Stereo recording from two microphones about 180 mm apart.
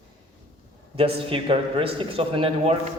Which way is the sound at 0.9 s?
30° right (ahead or behind).